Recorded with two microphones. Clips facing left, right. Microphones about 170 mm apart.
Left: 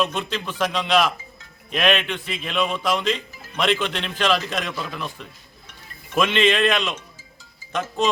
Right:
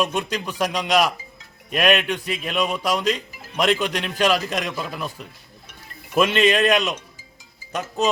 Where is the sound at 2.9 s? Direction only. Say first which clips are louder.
Right 2 dB; 40° right (ahead or behind).